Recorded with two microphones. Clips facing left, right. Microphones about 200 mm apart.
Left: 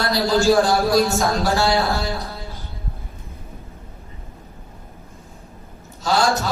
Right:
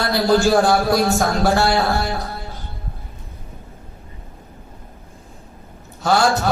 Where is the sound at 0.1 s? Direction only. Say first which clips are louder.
Right 1 dB; 55° right (ahead or behind).